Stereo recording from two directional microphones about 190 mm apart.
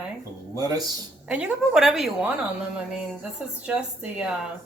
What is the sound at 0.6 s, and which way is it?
Speech, 20° right (ahead or behind).